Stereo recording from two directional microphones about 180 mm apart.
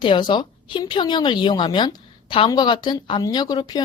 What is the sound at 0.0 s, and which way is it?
A woman's voice, 25° left (ahead or behind).